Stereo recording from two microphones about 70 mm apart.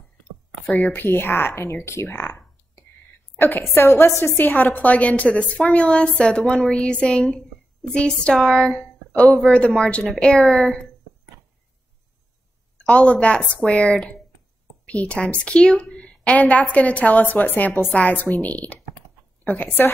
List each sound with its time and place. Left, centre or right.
0.7 s a woman's voice: centre
0.9 s speech: left
2.0 s speech: left
3.3 s a sound: left
3.7 s a woman's voice: left; by 10.8 s centre
12.7 s a woman's voice: centre